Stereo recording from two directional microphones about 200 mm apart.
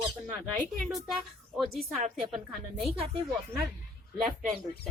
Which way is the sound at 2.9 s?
30° right (ahead or behind).